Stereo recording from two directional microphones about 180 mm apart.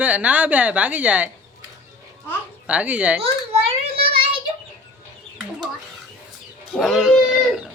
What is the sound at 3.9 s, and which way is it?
Child singing, 30° right (ahead or behind).